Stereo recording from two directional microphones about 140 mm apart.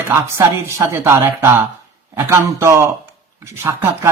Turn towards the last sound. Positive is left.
turn(degrees=-20)  # may be behind; listen again after turning